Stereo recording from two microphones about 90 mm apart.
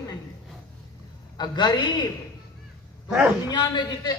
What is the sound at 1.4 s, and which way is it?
Speech, 55° left (ahead or behind).